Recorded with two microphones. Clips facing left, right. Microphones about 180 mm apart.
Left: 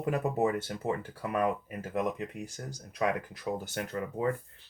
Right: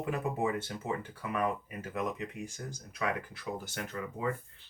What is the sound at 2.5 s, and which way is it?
Speech, 35° left (ahead or behind).